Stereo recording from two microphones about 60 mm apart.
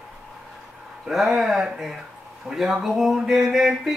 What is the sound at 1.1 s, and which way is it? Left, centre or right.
Speech, centre.